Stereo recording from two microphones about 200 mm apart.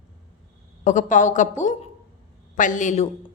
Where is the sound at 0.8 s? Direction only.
40° left (ahead or behind).